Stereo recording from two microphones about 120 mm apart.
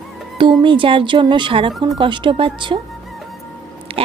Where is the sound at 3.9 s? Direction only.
50° right (ahead or behind).